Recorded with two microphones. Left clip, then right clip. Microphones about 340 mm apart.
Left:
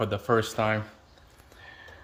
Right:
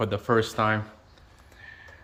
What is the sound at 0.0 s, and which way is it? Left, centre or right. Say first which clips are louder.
Speech: right 1 dB; centre.